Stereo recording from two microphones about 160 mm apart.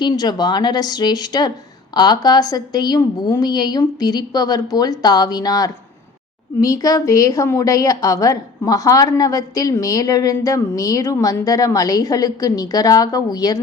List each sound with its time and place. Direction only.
0.0 s a woman's voice: 25° left (ahead or behind)